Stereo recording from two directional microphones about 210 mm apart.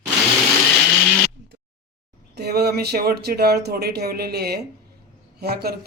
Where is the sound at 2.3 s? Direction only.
50° right (ahead or behind).